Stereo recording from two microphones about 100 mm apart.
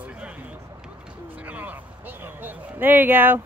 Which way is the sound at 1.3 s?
15° right (ahead or behind).